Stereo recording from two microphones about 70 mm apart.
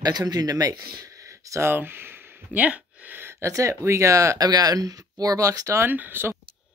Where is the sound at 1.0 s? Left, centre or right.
Right.